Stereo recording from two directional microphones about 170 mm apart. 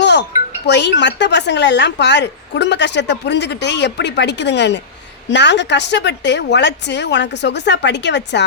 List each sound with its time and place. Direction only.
0.0 s wind chime: 85° left
0.7 s a woman's voice: 85° left